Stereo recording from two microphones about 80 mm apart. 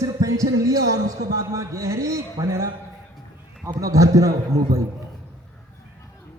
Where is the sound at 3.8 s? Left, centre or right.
Right.